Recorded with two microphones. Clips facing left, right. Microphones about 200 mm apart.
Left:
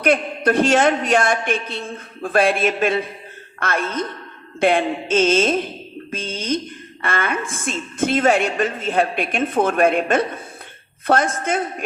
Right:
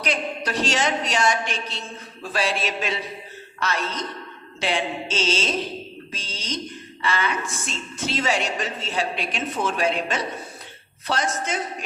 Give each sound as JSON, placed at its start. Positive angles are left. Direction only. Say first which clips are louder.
{"t": 0.0, "sound": "a woman's voice", "louder": "left 9 dB", "side_deg": 55}